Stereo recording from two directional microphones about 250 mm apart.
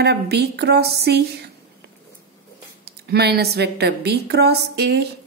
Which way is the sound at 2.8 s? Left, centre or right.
Right.